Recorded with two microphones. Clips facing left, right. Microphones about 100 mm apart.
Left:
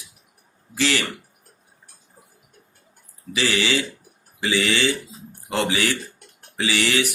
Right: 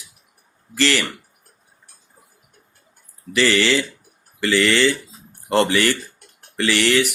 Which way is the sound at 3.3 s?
90° right.